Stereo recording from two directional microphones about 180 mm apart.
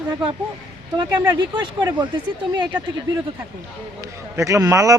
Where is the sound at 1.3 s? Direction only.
25° right (ahead or behind).